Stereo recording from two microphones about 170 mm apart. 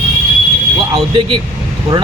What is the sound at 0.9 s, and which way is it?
Speech, 30° right (ahead or behind).